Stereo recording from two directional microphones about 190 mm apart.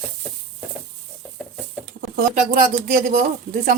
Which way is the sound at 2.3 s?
45° right (ahead or behind).